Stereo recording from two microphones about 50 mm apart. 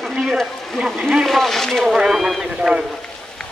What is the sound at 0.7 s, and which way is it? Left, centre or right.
Speech, centre.